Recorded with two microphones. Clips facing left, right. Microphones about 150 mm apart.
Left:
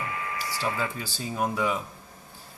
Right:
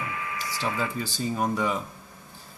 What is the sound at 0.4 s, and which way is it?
Printer, 35° left (ahead or behind).